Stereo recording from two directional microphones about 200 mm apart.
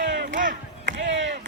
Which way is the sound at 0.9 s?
65° right (ahead or behind).